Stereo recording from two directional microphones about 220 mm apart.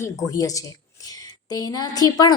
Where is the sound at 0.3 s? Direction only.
15° left (ahead or behind).